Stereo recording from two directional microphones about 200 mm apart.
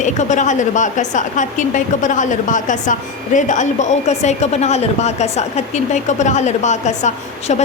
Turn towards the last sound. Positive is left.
turn(degrees=35)  # may be behind; listen again after turning